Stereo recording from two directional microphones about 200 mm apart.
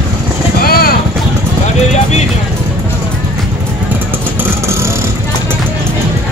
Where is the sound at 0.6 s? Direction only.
50° left (ahead or behind).